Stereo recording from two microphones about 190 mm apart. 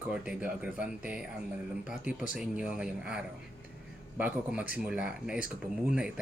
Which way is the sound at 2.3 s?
5° right (ahead or behind).